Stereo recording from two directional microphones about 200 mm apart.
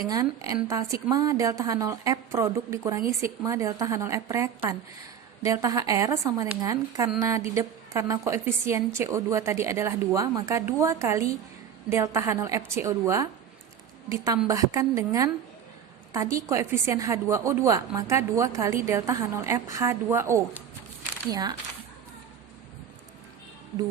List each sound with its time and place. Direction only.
0.1 s a woman's voice: 15° right (ahead or behind)
14.4 s a woman's voice: 15° right (ahead or behind)